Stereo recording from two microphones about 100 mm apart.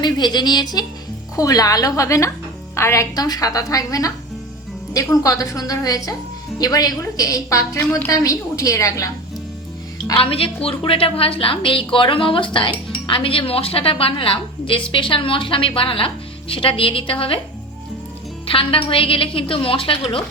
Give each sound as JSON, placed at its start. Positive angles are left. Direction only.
{"t": 0.0, "sound": "a woman's voice", "side_deg": 45}
{"t": 7.8, "sound": "a woman's voice", "side_deg": 20}
{"t": 8.1, "sound": "a woman's voice", "side_deg": 35}
{"t": 10.2, "sound": "a woman's voice", "side_deg": 65}
{"t": 18.4, "sound": "a woman's voice", "side_deg": 65}